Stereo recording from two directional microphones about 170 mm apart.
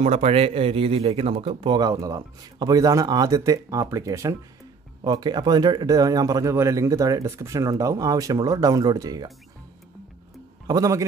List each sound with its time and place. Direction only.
0.0 s speech: 40° right (ahead or behind); by 9.3 s 20° right (ahead or behind)
10.7 s speech: 20° right (ahead or behind)